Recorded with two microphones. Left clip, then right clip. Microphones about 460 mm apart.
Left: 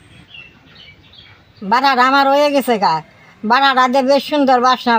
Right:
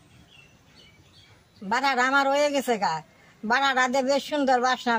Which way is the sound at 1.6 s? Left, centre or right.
Right.